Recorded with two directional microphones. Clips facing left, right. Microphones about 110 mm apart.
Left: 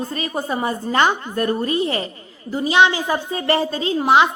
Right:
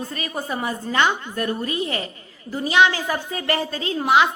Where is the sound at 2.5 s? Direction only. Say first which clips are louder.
Left 2 dB; 20° left (ahead or behind).